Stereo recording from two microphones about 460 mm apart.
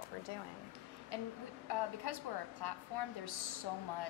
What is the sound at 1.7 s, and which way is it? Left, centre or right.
A woman's voice, left.